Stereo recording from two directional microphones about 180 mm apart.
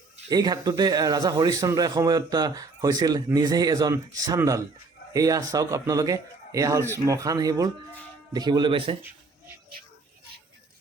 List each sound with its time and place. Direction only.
0.3 s speech: 20° right (ahead or behind)